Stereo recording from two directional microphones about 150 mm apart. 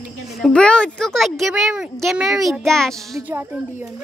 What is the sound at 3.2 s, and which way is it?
Speech, 10° right (ahead or behind).